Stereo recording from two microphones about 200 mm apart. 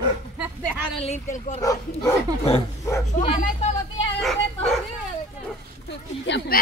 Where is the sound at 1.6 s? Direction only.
15° left (ahead or behind).